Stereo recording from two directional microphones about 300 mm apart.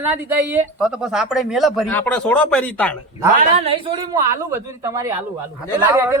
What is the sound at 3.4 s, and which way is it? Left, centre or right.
Speech, centre.